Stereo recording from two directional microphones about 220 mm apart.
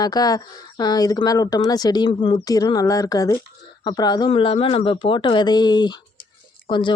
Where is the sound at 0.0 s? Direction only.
15° left (ahead or behind).